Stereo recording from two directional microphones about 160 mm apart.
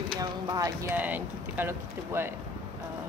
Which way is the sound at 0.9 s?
10° right (ahead or behind).